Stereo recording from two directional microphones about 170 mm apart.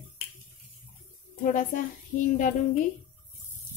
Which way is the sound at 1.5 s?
50° left (ahead or behind).